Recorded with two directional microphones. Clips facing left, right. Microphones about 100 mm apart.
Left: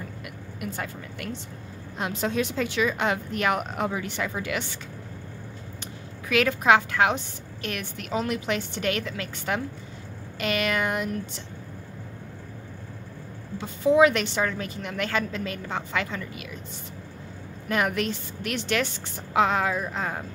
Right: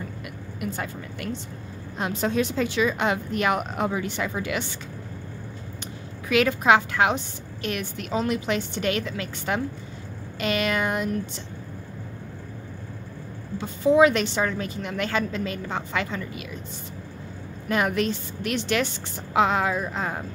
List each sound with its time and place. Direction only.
0.6 s a woman's voice: 25° right (ahead or behind)
2.0 s a woman's voice: 35° right (ahead or behind)
5.8 s a sound: 20° right (ahead or behind)
7.6 s a woman's voice: 20° right (ahead or behind)
13.6 s a woman's voice: 30° right (ahead or behind)
17.6 s a woman's voice: 25° right (ahead or behind)